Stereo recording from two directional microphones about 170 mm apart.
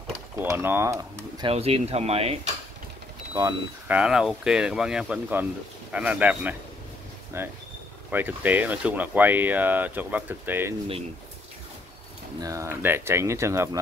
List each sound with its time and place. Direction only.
0.4 s speech: 15° right (ahead or behind)
1.4 s speech: 35° right (ahead or behind)
3.8 s speech: 5° right (ahead or behind)
12.4 s speech: 20° right (ahead or behind)